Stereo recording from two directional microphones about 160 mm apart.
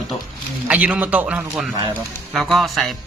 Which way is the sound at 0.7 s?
10° right (ahead or behind).